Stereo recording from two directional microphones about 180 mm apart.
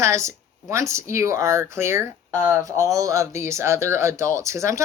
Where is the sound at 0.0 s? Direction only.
15° right (ahead or behind).